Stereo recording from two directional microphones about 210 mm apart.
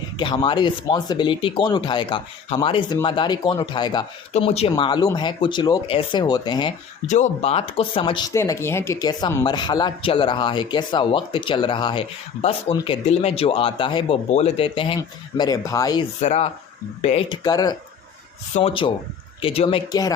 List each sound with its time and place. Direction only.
0.2 s speech: 25° left (ahead or behind)
4.7 s speech: 20° left (ahead or behind)
7.1 s speech: 30° left (ahead or behind)
8.4 s speech: 10° left (ahead or behind)
16.2 s speech: 30° left (ahead or behind)